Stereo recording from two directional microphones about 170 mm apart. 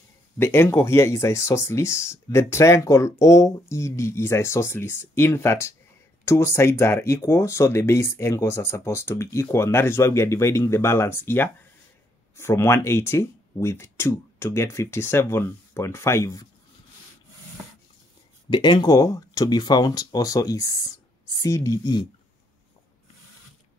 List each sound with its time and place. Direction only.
0.4 s speech: 15° left (ahead or behind)
18.5 s speech: 25° left (ahead or behind)